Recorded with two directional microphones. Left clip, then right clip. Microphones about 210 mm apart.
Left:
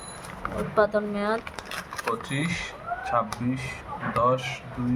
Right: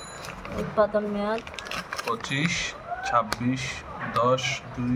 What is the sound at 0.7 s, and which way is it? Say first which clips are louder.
Speech: even; 60° left (ahead or behind).